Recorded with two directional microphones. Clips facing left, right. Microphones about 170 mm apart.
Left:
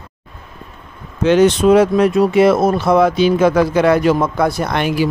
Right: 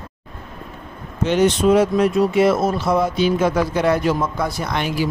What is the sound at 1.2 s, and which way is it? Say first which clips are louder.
Speech: left 5 dB; 90° left.